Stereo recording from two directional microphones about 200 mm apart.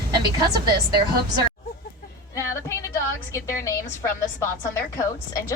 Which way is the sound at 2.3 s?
15° left (ahead or behind).